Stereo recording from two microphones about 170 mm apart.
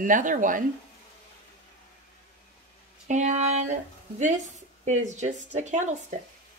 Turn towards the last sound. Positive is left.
turn(degrees=-45)  # may be behind; listen again after turning